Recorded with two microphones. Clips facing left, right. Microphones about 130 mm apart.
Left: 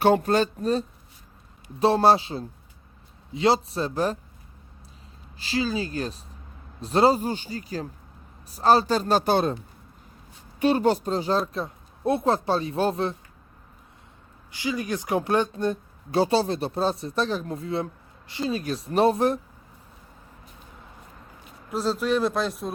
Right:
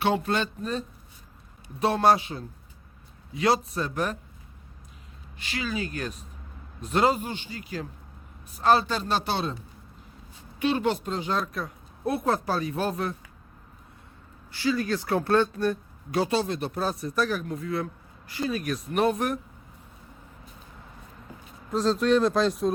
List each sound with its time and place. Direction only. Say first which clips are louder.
0.0 s speech: left 5 dB; 45° left (ahead or behind)
5.4 s speech: left 5 dB; 30° left (ahead or behind); by 9.6 s 50° left (ahead or behind)
10.6 s speech: left 4 dB; 40° left (ahead or behind)
14.5 s speech: right 2 dB; 15° left (ahead or behind)
21.7 s speech: right 2 dB; 5° left (ahead or behind)